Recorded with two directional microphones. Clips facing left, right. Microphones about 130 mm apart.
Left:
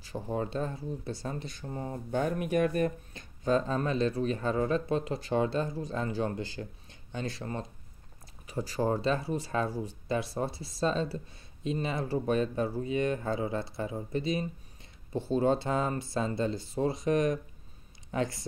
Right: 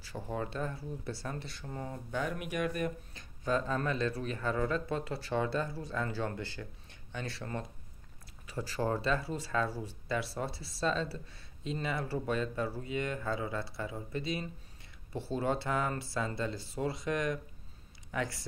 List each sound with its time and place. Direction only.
0.0 s speech: 20° left (ahead or behind); by 2.9 s 35° left (ahead or behind)
3.4 s speech: 25° left (ahead or behind)